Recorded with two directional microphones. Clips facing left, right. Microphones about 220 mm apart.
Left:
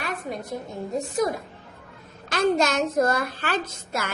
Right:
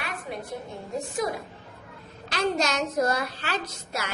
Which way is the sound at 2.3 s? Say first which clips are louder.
Left 4 dB; 50° left (ahead or behind).